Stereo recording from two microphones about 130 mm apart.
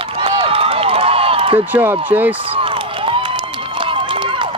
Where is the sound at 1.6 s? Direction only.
15° right (ahead or behind).